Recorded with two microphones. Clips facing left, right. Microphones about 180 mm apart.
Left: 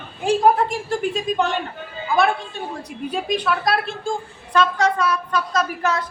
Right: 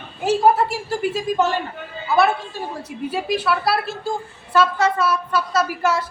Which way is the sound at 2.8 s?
5° right (ahead or behind).